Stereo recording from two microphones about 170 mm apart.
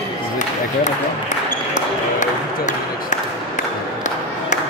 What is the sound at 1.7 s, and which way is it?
Ping, 45° left (ahead or behind).